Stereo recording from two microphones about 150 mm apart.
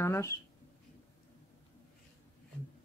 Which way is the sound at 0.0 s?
20° left (ahead or behind).